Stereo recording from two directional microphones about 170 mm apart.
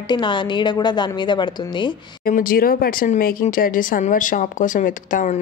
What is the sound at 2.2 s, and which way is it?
Speech, 55° left (ahead or behind).